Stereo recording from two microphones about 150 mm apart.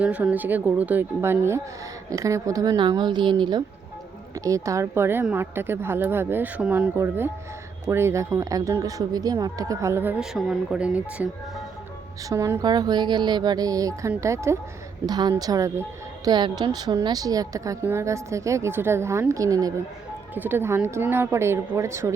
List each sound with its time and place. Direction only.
0.0 s a woman's voice: 10° right (ahead or behind); by 3.6 s 30° right (ahead or behind)
4.4 s a woman's voice: 20° right (ahead or behind)
12.3 s a woman's voice: 20° right (ahead or behind)